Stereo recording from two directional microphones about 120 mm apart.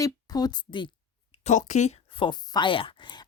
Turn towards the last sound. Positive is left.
turn(degrees=40)  # may be behind; listen again after turning